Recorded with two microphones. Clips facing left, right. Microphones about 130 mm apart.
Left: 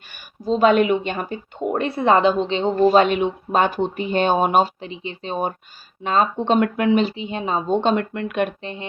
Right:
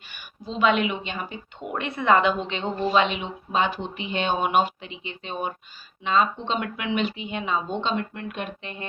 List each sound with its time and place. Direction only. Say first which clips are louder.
0.1 s speech: left 12 dB; 40° left (ahead or behind)
8.1 s speech: left 10 dB; 75° left (ahead or behind)
8.6 s speech: left 5 dB; 25° left (ahead or behind)